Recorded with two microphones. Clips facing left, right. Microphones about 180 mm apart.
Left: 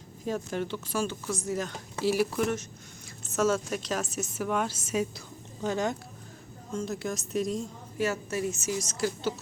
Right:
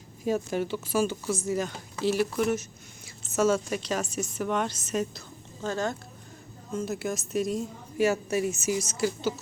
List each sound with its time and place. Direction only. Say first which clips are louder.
0.3 s a woman's voice: right 4 dB; 5° right (ahead or behind); by 6.0 s 15° left (ahead or behind)
6.7 s a woman's voice: right 2 dB; 5° right (ahead or behind)